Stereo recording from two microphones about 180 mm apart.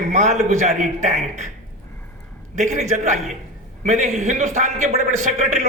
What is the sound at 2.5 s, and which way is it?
A man's voice, 40° right (ahead or behind).